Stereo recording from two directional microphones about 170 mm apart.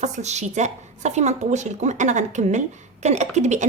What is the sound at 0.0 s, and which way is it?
A woman's voice, 40° right (ahead or behind).